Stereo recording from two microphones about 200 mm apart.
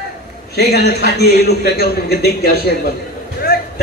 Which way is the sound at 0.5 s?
55° left (ahead or behind).